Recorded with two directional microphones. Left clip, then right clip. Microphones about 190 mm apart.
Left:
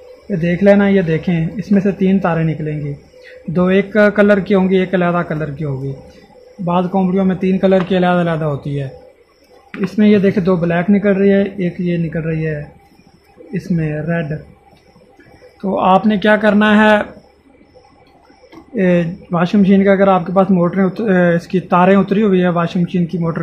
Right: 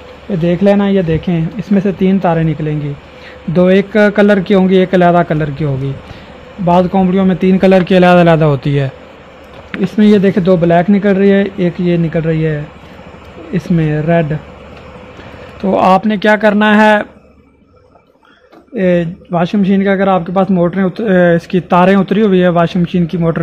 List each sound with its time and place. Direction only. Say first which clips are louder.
0.4 s a man's voice: even; 30° right (ahead or behind)
9.7 s speech: right 3 dB; 35° right (ahead or behind)
15.6 s a man's voice: right 3 dB; 40° right (ahead or behind)
18.8 s a man's voice: right 3 dB; 40° right (ahead or behind)